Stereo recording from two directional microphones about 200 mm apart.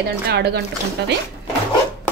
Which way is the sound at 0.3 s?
55° right (ahead or behind).